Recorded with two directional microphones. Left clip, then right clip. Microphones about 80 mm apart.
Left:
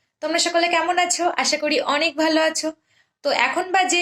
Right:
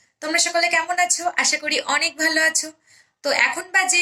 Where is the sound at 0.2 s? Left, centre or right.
Centre.